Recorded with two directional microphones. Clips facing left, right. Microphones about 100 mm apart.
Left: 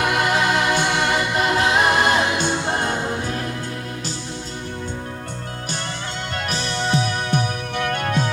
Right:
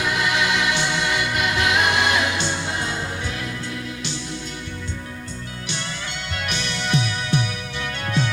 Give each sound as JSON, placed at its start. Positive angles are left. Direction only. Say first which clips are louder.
{"t": 0.0, "sound": "music", "louder": "left 3 dB", "side_deg": 50}
{"t": 1.4, "sound": "music", "louder": "left 3 dB", "side_deg": 35}
{"t": 6.3, "sound": "music", "louder": "left 3 dB", "side_deg": 35}